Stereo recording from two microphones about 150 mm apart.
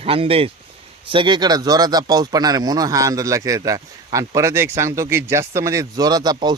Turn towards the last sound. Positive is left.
turn(degrees=-25)  # may be behind; listen again after turning